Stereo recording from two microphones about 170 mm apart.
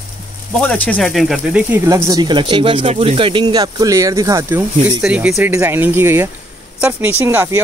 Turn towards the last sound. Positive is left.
turn(degrees=-15)  # may be behind; listen again after turning